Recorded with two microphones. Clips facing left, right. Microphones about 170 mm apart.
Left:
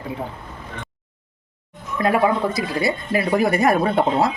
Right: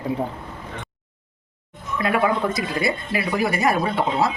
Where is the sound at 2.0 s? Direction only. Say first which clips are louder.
Left 3 dB; 40° left (ahead or behind).